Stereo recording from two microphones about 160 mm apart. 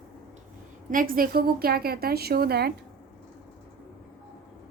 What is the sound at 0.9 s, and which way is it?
A woman's voice, 65° right (ahead or behind).